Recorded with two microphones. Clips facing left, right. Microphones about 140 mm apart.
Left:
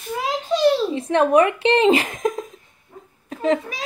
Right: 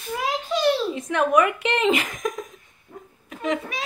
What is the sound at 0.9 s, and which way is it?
A child's voice, 30° left (ahead or behind).